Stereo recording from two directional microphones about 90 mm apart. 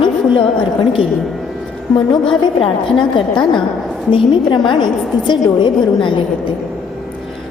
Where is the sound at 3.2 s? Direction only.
65° left (ahead or behind).